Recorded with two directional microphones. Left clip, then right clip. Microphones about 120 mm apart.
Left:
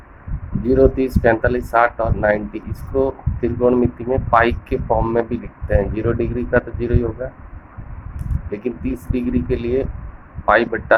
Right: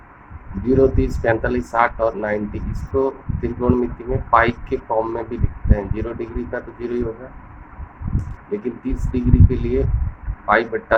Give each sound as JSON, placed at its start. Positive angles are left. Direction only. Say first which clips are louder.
{"t": 0.6, "sound": "speech", "louder": "left 2 dB", "side_deg": 35}